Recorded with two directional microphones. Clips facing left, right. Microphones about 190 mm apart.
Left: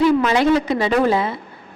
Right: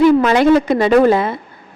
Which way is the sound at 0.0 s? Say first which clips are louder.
Right 5 dB; 55° right (ahead or behind).